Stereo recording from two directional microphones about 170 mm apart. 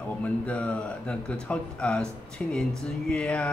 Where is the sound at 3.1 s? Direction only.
5° left (ahead or behind).